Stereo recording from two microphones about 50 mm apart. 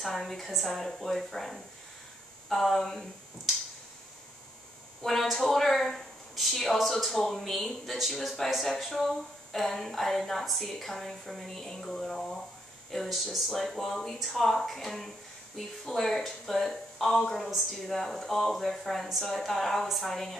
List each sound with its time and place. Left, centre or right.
0.0 s speech: centre
5.0 s speech: centre